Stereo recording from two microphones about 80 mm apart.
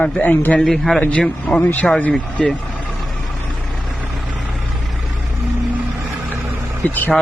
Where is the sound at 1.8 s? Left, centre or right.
Centre.